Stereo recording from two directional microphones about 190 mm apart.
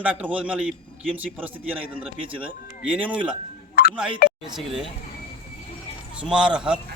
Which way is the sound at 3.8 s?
55° left (ahead or behind).